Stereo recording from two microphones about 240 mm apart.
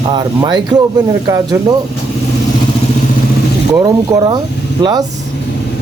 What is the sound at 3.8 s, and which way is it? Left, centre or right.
Speech, centre.